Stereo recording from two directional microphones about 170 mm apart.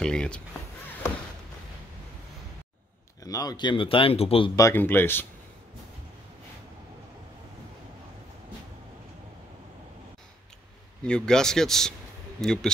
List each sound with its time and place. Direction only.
0.0 s speech: 5° left (ahead or behind)
3.3 s speech: 20° left (ahead or behind)
4.6 s speech: 15° left (ahead or behind)
11.1 s speech: 5° left (ahead or behind)